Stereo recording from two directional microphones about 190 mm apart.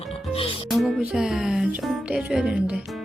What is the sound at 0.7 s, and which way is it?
Speech, centre (ahead or behind).